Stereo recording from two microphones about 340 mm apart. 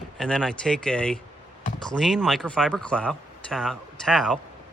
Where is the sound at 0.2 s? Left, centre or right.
Centre.